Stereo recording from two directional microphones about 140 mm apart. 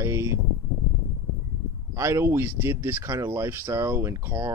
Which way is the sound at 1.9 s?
20° right (ahead or behind).